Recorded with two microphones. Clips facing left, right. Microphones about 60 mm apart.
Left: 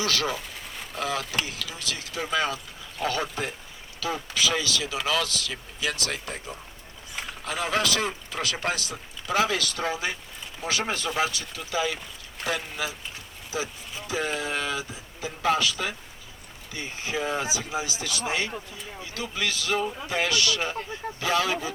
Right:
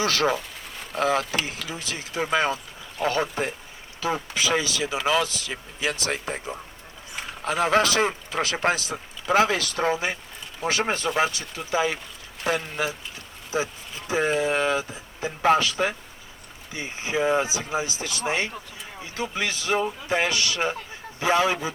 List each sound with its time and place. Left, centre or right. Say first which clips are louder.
0.0 s speech: right 5 dB; right
7.4 s speech: right 6 dB; right